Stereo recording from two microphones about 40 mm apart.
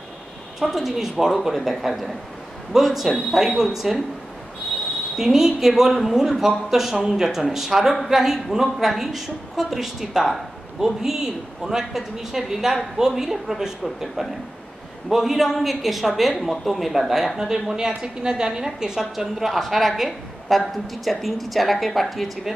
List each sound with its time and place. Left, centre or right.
0.6 s a man's voice: centre
5.1 s a man's voice: centre
19.1 s a woman's voice: centre